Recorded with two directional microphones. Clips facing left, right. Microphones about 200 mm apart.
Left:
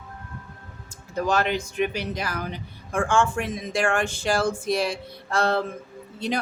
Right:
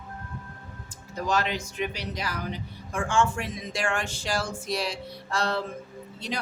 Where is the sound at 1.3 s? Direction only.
55° left (ahead or behind).